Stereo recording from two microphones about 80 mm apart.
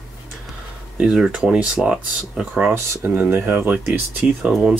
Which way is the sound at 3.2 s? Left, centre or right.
Right.